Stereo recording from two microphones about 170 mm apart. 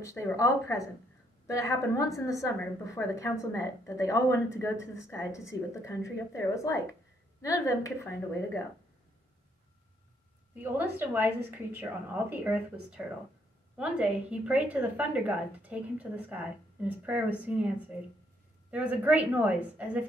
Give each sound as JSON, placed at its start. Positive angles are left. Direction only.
{"t": 0.0, "sound": "a woman's voice", "side_deg": 15}
{"t": 10.5, "sound": "a woman's voice", "side_deg": -10}
{"t": 18.7, "sound": "a woman's voice", "side_deg": -10}